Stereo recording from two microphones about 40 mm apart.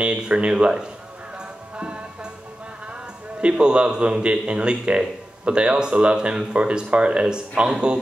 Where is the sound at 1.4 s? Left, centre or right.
Right.